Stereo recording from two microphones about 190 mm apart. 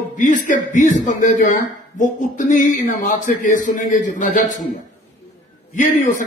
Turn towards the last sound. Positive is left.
turn(degrees=45)  # may be behind; listen again after turning